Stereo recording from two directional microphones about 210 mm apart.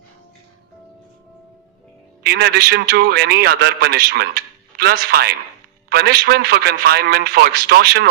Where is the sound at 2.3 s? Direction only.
50° right (ahead or behind).